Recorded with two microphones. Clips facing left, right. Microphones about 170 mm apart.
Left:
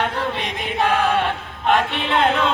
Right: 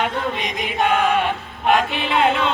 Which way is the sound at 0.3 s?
15° right (ahead or behind).